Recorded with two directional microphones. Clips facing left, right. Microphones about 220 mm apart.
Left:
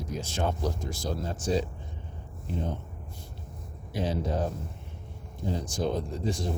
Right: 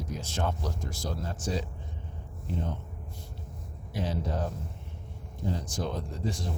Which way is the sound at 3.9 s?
15° left (ahead or behind).